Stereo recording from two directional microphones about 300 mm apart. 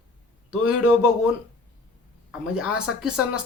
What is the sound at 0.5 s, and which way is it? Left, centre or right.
Speech, left.